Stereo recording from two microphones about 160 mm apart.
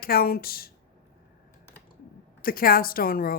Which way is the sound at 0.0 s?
65° left (ahead or behind).